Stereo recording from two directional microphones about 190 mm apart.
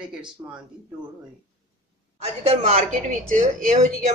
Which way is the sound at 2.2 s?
30° right (ahead or behind).